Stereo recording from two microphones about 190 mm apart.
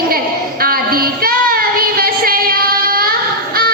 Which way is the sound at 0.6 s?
50° right (ahead or behind).